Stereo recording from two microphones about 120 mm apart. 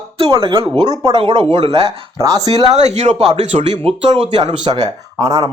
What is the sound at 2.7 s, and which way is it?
Speech, 70° right (ahead or behind).